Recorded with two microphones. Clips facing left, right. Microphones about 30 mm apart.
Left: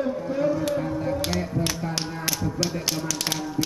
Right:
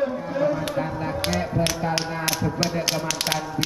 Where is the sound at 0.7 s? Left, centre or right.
Right.